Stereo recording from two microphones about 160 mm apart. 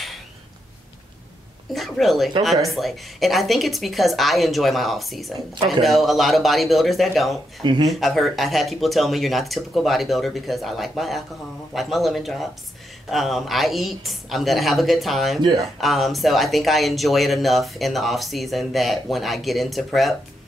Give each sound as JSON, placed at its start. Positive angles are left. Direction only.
{"t": 1.7, "sound": "speech", "side_deg": 0}
{"t": 7.6, "sound": "speech", "side_deg": -30}
{"t": 8.0, "sound": "speech", "side_deg": 0}